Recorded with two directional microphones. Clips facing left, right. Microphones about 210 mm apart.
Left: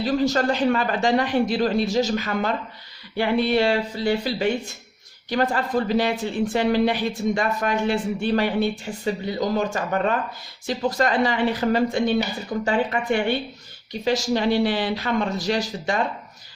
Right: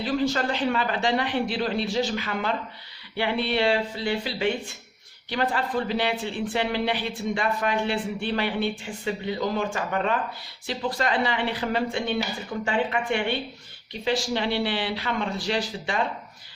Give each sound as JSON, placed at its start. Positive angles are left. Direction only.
{"t": 0.0, "sound": "speech", "side_deg": 40}